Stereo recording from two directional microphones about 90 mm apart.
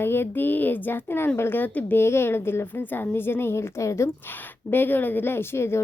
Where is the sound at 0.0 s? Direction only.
25° left (ahead or behind).